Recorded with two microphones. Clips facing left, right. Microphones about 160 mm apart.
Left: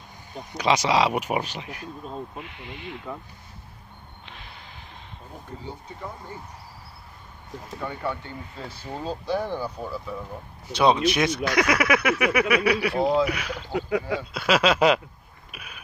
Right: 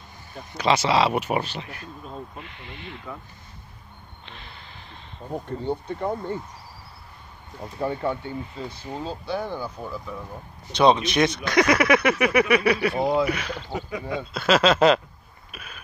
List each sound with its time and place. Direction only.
0.3 s speech: 15° left (ahead or behind)
4.3 s a sound: 10° left (ahead or behind)
5.6 s speech: 65° right (ahead or behind)
7.8 s speech: 25° right (ahead or behind)
8.6 s speech: 10° left (ahead or behind)
13.8 s speech: 75° left (ahead or behind)
14.3 s speech: 10° left (ahead or behind)
15.5 s a sound: 10° left (ahead or behind)